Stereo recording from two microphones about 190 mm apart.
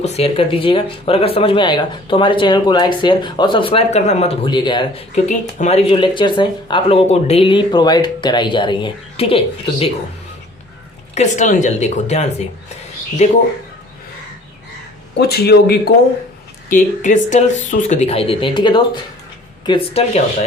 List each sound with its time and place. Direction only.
0.0 s speech: 35° left (ahead or behind)
5.1 s speech: 35° left (ahead or behind)
11.1 s speech: 40° left (ahead or behind)
15.2 s speech: 55° left (ahead or behind)
16.6 s speech: 40° left (ahead or behind)